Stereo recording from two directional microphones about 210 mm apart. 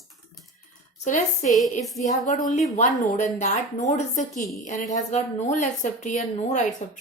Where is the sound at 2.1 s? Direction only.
35° left (ahead or behind).